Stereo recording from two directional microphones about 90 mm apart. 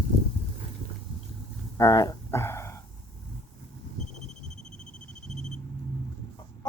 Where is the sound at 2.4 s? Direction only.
30° left (ahead or behind).